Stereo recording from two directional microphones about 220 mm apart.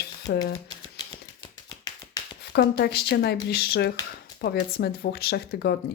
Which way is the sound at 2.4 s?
50° left (ahead or behind).